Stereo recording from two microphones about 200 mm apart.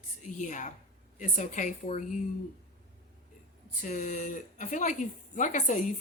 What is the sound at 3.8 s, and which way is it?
Speech, 40° left (ahead or behind).